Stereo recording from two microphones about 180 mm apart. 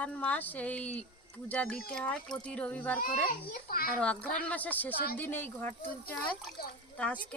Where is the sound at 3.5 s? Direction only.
55° left (ahead or behind).